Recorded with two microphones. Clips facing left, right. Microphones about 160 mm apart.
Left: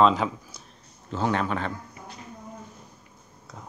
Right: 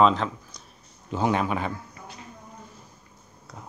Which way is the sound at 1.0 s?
15° right (ahead or behind).